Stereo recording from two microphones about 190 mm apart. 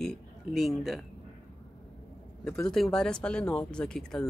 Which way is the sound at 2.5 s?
5° left (ahead or behind).